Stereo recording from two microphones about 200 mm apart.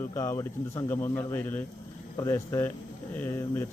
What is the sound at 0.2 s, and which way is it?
Speech, 15° left (ahead or behind).